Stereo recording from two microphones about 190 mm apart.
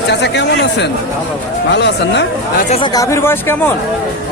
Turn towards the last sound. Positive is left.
turn(degrees=10)  # may be behind; listen again after turning